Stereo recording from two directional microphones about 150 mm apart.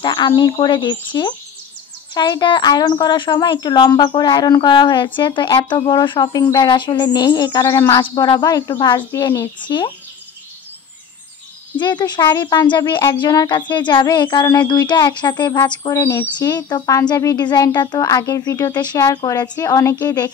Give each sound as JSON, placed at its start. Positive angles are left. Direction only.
{"t": 0.0, "sound": "a sound", "side_deg": 30}
{"t": 0.4, "sound": "speech", "side_deg": 30}
{"t": 9.6, "sound": "speech", "side_deg": 30}
{"t": 11.7, "sound": "speech", "side_deg": 30}